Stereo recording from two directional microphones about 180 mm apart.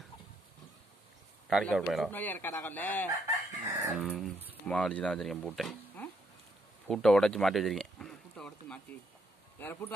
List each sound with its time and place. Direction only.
1.5 s speech: centre (ahead or behind)
3.6 s dog: 20° right (ahead or behind)
3.9 s speech: 5° right (ahead or behind)
4.6 s speech: 5° left (ahead or behind)
6.9 s a sound: 5° left (ahead or behind)
9.6 s speech: 10° left (ahead or behind)